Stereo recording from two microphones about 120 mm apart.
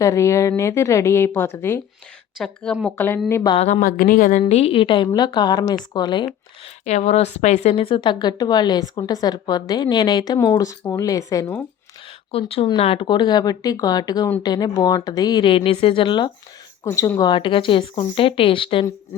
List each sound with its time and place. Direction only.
0.0 s speech: 25° left (ahead or behind)
2.4 s a woman's voice: 5° left (ahead or behind)
3.5 s a woman's voice: 60° left (ahead or behind)
4.3 s a woman's voice: 75° left (ahead or behind); by 6.2 s 35° left (ahead or behind)
6.8 s a woman's voice: 65° left (ahead or behind); by 11.5 s 30° left (ahead or behind)
12.3 s a woman's voice: 55° left (ahead or behind)
16.8 s speech: 25° left (ahead or behind); by 18.9 s 45° left (ahead or behind)